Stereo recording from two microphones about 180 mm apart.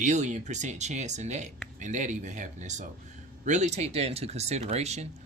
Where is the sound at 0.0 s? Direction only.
40° right (ahead or behind).